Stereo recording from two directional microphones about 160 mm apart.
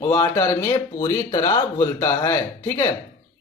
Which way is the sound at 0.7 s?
25° left (ahead or behind).